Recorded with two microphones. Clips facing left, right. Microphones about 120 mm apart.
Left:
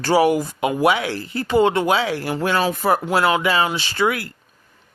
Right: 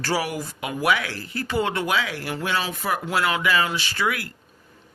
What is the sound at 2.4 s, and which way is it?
Speech, 45° left (ahead or behind).